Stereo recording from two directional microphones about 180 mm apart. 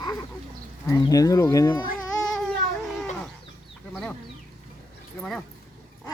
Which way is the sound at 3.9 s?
5° left (ahead or behind).